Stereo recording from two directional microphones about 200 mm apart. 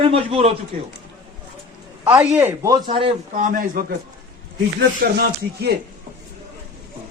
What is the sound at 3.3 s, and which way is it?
Speech, 40° right (ahead or behind).